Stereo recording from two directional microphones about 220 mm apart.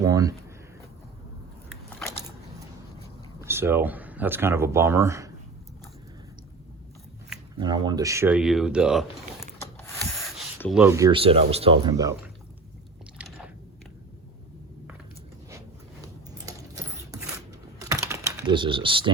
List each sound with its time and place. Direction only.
0.0 s speech: 15° right (ahead or behind)
3.4 s speech: 10° right (ahead or behind)
7.6 s speech: 20° right (ahead or behind); by 9.0 s 5° right (ahead or behind)
10.2 s a sound: centre (ahead or behind)
10.6 s speech: centre (ahead or behind)
10.8 s speech: 15° right (ahead or behind)
11.2 s speech: 25° right (ahead or behind)
13.1 s chewing: 5° right (ahead or behind)
16.5 s horse: 15° right (ahead or behind)
17.7 s typing: 15° right (ahead or behind)